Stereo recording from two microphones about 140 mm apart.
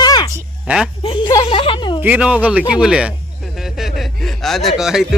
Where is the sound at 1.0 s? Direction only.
35° left (ahead or behind).